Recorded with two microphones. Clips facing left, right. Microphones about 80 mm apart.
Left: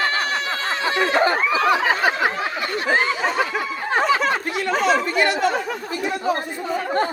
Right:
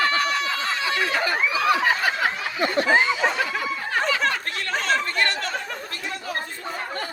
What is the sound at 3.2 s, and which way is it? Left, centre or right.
Snicker, centre.